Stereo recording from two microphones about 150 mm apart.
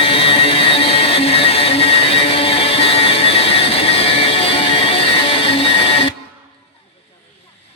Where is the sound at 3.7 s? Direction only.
40° left (ahead or behind).